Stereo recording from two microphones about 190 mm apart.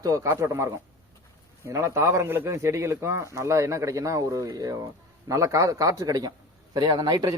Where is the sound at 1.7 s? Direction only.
15° right (ahead or behind).